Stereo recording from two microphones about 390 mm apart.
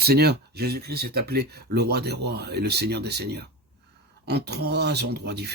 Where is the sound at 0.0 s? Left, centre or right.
Right.